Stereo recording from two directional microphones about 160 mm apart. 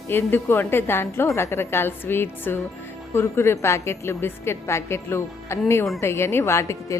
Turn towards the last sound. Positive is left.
turn(degrees=15)  # may be behind; listen again after turning